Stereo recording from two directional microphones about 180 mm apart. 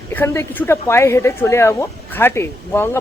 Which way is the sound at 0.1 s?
10° left (ahead or behind).